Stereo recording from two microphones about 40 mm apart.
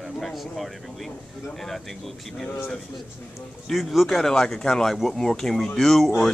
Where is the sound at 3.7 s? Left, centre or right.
Centre.